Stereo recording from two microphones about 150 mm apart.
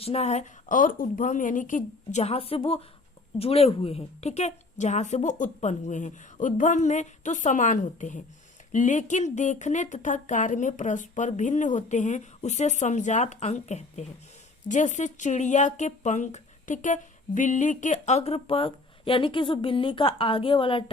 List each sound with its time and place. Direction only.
0.0 s speech: 45° left (ahead or behind)